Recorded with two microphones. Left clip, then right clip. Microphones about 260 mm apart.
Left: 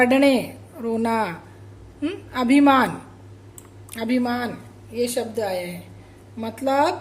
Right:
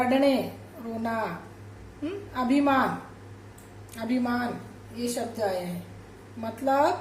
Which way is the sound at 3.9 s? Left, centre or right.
Left.